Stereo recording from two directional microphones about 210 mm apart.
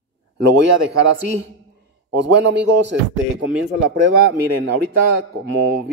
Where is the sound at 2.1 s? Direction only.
60° right (ahead or behind).